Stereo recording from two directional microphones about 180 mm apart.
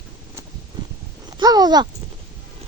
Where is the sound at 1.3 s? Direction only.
20° right (ahead or behind).